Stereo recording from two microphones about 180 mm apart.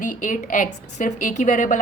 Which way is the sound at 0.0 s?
45° left (ahead or behind).